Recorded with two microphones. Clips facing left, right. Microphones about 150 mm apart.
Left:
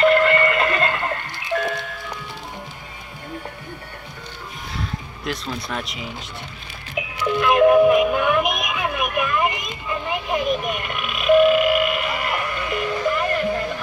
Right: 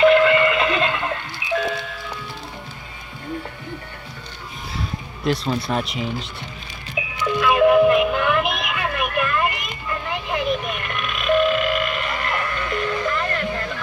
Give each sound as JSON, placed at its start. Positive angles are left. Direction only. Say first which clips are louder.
{"t": 0.0, "sound": "a sound", "louder": "right 2 dB", "side_deg": -5}
{"t": 0.7, "sound": "music", "louder": "even", "side_deg": -5}
{"t": 5.2, "sound": "speech", "louder": "right 7 dB", "side_deg": -30}
{"t": 7.2, "sound": "music", "louder": "left 1 dB", "side_deg": 10}